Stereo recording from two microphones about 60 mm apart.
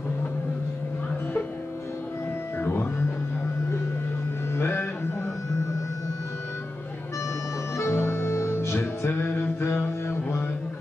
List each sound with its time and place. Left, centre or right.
2.6 s music: left
4.6 s a sound: left
7.7 s music: left